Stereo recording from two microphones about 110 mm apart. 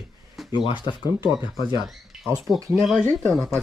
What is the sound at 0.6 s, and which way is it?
Speech, 45° left (ahead or behind).